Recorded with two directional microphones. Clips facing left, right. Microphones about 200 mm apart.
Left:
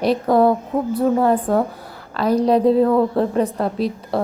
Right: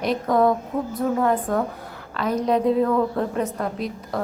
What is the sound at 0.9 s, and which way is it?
A woman's voice, 30° left (ahead or behind).